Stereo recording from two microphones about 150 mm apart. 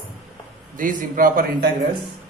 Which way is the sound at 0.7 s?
60° right (ahead or behind).